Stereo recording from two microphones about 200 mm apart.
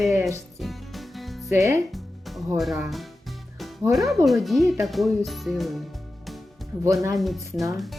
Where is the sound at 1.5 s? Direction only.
15° right (ahead or behind).